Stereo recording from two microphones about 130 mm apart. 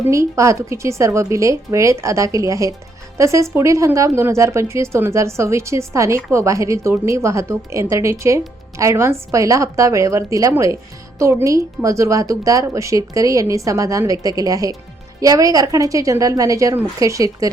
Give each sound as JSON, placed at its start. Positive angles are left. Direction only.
{"t": 0.1, "sound": "speech", "side_deg": -25}